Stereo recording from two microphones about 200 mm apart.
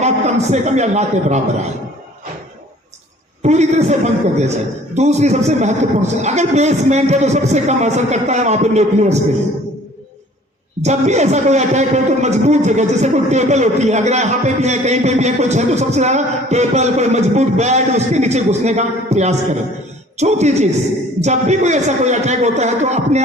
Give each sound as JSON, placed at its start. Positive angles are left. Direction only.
{"t": 0.5, "sound": "speech", "side_deg": -35}
{"t": 3.4, "sound": "speech", "side_deg": -35}
{"t": 10.8, "sound": "speech", "side_deg": -35}